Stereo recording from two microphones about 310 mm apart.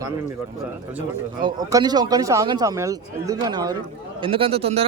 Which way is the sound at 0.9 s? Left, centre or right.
Centre.